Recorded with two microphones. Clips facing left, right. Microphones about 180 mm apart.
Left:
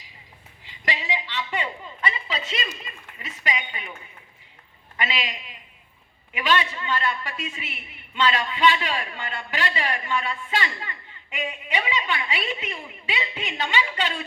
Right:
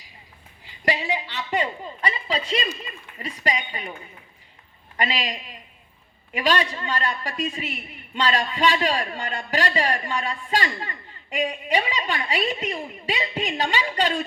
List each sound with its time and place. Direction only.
0.6 s a sound: 40° right (ahead or behind)
3.2 s a woman's voice: 40° right (ahead or behind)
4.9 s a man's voice: 40° right (ahead or behind)